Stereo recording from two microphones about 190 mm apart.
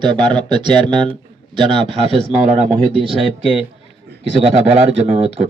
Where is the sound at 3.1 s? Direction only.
Centre (ahead or behind).